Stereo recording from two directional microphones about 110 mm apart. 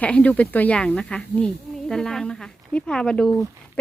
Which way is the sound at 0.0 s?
10° left (ahead or behind).